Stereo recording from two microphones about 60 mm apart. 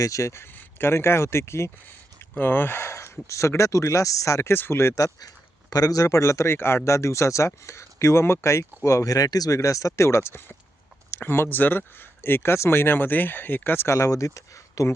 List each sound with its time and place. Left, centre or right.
0.0 s speech: left
0.4 s speech: left
2.3 s speech: left
4.5 s speech: left
4.9 s speech: left
5.7 s speech: left
9.6 s speech: left
11.2 s speech: left
13.8 s speech: left